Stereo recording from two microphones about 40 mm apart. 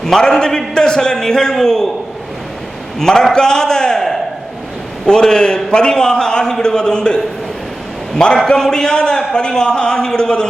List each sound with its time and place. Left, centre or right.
0.0 s a man's voice: centre
3.0 s a man's voice: centre
8.4 s a man's voice: centre